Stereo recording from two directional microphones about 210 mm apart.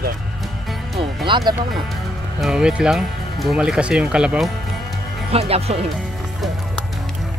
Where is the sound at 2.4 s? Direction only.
5° right (ahead or behind).